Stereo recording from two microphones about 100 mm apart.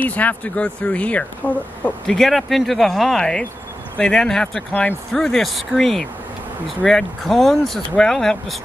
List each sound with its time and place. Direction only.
0.0 s speech: 15° left (ahead or behind)